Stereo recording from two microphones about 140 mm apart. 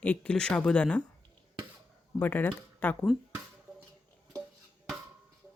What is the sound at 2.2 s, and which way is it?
Speech, 15° left (ahead or behind).